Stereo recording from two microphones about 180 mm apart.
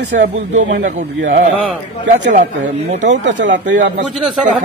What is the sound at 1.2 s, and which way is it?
Speech, 90° right.